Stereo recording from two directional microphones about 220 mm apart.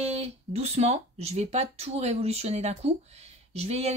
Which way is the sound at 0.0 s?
30° right (ahead or behind).